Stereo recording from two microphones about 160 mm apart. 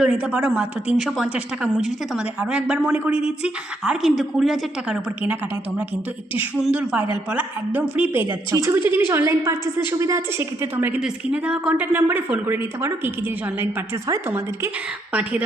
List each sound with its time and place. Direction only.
0.0 s a woman's voice: 5° right (ahead or behind)